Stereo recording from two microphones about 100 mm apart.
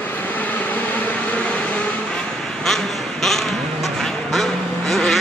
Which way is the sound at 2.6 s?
5° left (ahead or behind).